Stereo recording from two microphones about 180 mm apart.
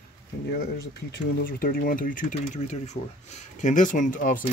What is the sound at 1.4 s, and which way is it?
Speech, 55° left (ahead or behind).